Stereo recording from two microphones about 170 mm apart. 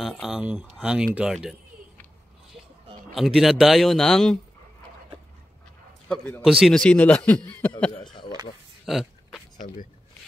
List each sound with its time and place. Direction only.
0.2 s speech: 5° right (ahead or behind)
3.2 s speech: centre (ahead or behind)
6.0 s a man's voice: 5° left (ahead or behind)
7.9 s a sound: 25° left (ahead or behind)
8.8 s a sound: centre (ahead or behind)
9.6 s speech: 35° left (ahead or behind)